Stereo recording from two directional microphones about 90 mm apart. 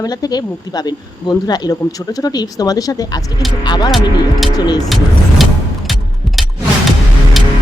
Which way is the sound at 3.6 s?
55° left (ahead or behind).